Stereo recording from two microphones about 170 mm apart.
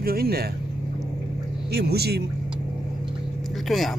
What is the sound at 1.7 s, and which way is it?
Speech, 70° right (ahead or behind).